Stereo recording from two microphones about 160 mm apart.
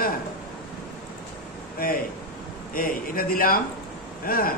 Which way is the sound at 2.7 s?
65° left (ahead or behind).